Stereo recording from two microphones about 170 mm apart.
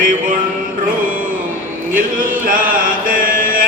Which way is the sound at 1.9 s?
55° right (ahead or behind).